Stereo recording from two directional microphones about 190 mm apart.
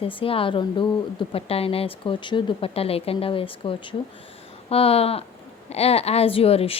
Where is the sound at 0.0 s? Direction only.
30° left (ahead or behind).